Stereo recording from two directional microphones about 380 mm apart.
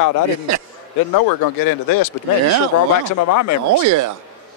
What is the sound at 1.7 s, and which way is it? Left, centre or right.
Speech, left.